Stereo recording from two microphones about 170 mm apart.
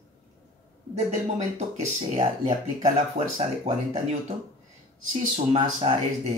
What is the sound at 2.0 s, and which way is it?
Speech, 40° right (ahead or behind).